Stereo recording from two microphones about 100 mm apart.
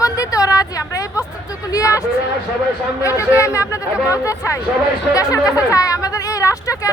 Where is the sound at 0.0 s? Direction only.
35° left (ahead or behind).